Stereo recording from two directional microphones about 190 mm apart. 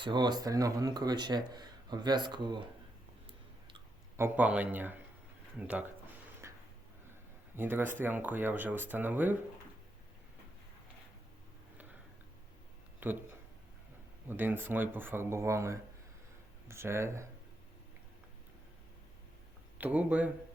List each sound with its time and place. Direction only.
0.0 s speech: 25° right (ahead or behind)
4.2 s speech: 10° right (ahead or behind)
6.4 s a sound: 15° right (ahead or behind)
7.5 s speech: 10° right (ahead or behind)
13.0 s speech: 10° right (ahead or behind)
14.3 s speech: 10° right (ahead or behind)
19.8 s speech: 5° right (ahead or behind)